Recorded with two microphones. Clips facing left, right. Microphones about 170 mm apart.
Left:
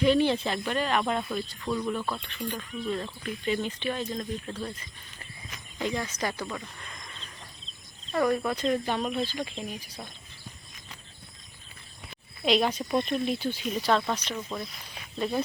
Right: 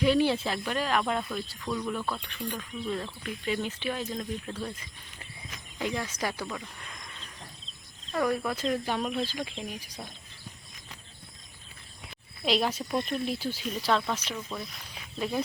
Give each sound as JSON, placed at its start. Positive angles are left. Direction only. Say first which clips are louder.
{"t": 0.0, "sound": "speech", "louder": "left 1 dB", "side_deg": -5}
{"t": 8.1, "sound": "speech", "louder": "left 2 dB", "side_deg": 0}
{"t": 12.5, "sound": "speech", "louder": "left 3 dB", "side_deg": 0}
{"t": 14.5, "sound": "speech", "louder": "left 2 dB", "side_deg": 20}
{"t": 15.2, "sound": "speech", "louder": "left 2 dB", "side_deg": -5}